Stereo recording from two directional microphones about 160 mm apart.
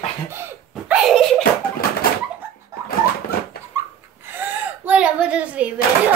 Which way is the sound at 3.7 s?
20° right (ahead or behind).